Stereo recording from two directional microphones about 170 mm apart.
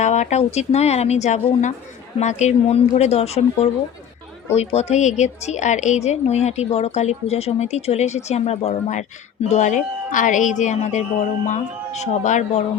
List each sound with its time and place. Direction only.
0.0 s a woman's voice: 45° left (ahead or behind)